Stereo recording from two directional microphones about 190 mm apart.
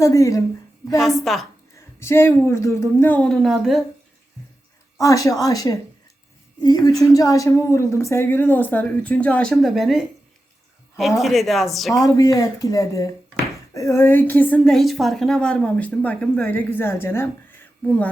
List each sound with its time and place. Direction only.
0.0 s a woman's voice: 15° left (ahead or behind)
1.2 s a woman's voice: centre (ahead or behind)
1.7 s a woman's voice: 15° left (ahead or behind)
4.9 s a woman's voice: 15° left (ahead or behind); by 10.0 s centre (ahead or behind)
11.2 s a woman's voice: centre (ahead or behind)
11.9 s a woman's voice: 15° left (ahead or behind)